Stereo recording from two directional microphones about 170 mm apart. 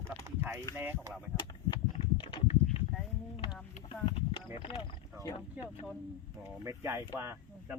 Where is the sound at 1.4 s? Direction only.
25° left (ahead or behind).